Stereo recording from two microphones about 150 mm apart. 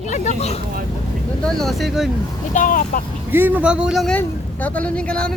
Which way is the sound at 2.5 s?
60° left (ahead or behind).